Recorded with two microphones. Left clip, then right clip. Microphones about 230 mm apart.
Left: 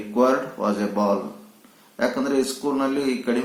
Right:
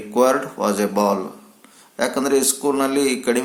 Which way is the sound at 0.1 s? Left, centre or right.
Right.